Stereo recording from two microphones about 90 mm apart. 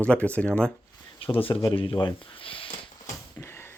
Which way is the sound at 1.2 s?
90° left.